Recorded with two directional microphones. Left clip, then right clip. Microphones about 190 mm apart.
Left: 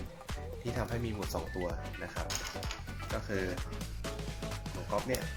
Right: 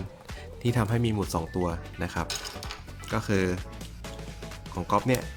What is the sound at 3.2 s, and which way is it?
Speech, 45° right (ahead or behind).